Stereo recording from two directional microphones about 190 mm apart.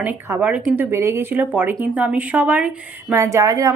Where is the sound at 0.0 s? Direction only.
10° right (ahead or behind).